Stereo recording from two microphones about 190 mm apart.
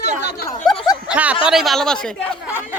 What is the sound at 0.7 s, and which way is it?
Speech, 20° left (ahead or behind).